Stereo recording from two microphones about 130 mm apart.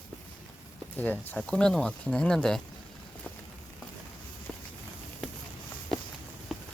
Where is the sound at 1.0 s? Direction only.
10° left (ahead or behind).